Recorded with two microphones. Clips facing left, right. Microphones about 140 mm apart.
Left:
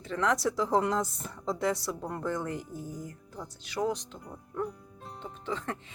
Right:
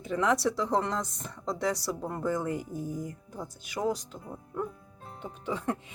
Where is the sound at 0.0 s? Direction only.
10° right (ahead or behind).